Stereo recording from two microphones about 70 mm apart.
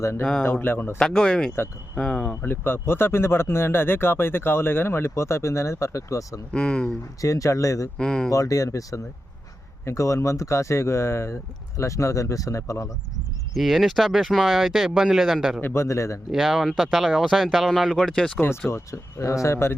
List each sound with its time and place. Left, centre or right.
0.4 s speech: left
0.9 s speech: centre
2.4 s speech: left
6.5 s speech: centre
7.2 s speech: left
7.9 s speech: centre
8.3 s speech: left
13.5 s speech: centre
15.6 s speech: left
16.3 s speech: centre
17.9 s speech: centre
18.7 s speech: left